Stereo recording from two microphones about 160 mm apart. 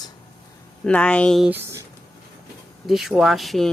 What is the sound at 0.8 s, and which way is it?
Speech, 5° left (ahead or behind).